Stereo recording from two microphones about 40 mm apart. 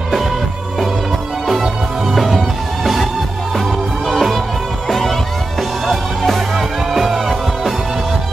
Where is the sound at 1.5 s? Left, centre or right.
Centre.